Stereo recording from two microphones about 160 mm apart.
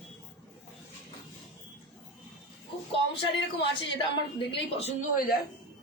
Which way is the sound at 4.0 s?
35° left (ahead or behind).